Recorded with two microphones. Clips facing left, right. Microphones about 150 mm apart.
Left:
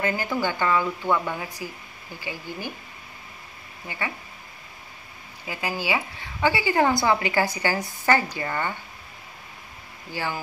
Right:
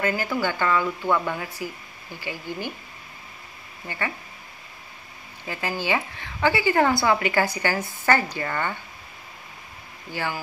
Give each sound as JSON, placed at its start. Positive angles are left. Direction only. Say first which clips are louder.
{"t": 0.0, "sound": "speech", "louder": "right 1 dB", "side_deg": 20}
{"t": 3.8, "sound": "speech", "louder": "right 2 dB", "side_deg": 15}
{"t": 5.4, "sound": "speech", "louder": "right 1 dB", "side_deg": 15}
{"t": 10.1, "sound": "speech", "louder": "even", "side_deg": 15}